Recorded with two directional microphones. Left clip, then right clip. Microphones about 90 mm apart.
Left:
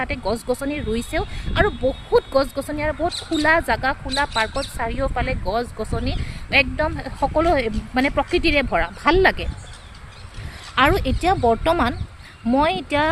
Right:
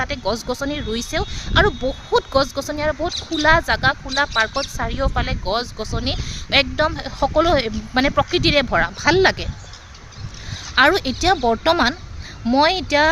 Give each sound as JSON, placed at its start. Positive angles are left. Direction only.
{"t": 0.0, "sound": "speech", "side_deg": -35}
{"t": 10.8, "sound": "speech", "side_deg": -40}